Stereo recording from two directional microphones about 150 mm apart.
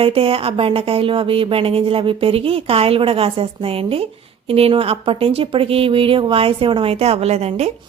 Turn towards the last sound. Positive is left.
turn(degrees=-45)  # may be behind; listen again after turning